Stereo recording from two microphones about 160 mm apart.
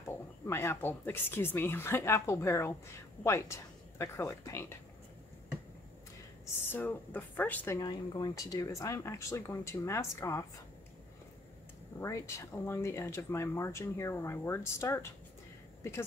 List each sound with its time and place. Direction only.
0.5 s speech: 15° left (ahead or behind)
6.7 s speech: 10° left (ahead or behind)
7.8 s speech: 25° left (ahead or behind)
12.0 s speech: 20° left (ahead or behind)